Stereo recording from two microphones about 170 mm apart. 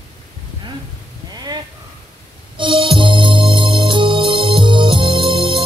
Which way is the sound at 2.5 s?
30° right (ahead or behind).